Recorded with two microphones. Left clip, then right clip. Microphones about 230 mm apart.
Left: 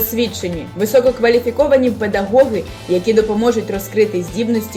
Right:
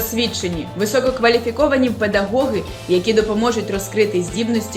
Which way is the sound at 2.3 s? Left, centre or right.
Left.